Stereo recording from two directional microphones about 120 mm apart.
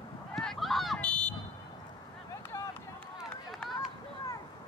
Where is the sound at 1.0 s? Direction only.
10° left (ahead or behind).